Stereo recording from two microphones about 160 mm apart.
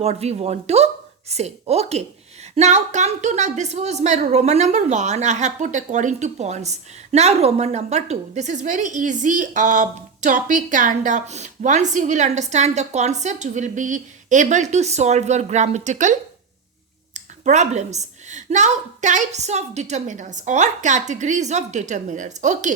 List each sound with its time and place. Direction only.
0.0 s a woman's voice: 40° right (ahead or behind)
17.2 s a woman's voice: 45° right (ahead or behind)